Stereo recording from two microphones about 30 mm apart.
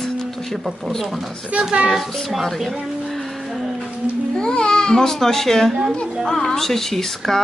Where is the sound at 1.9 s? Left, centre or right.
Centre.